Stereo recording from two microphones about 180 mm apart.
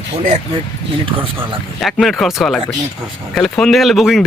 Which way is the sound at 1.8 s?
Centre (ahead or behind).